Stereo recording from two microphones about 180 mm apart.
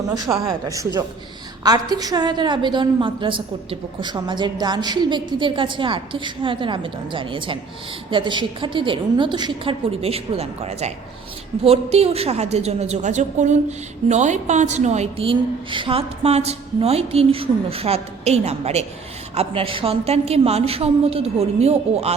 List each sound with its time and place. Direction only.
0.1 s a woman's voice: 20° right (ahead or behind); by 22.1 s 35° right (ahead or behind)